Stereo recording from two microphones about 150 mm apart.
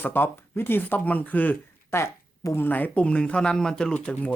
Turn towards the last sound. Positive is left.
turn(degrees=10)  # may be behind; listen again after turning